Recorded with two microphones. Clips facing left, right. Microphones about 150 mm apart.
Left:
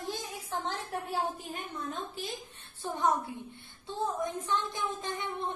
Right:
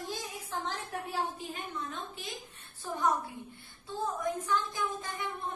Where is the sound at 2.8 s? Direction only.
25° left (ahead or behind).